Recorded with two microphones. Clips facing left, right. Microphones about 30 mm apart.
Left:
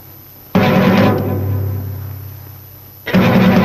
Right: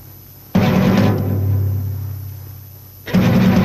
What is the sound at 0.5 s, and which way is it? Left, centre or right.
Music, left.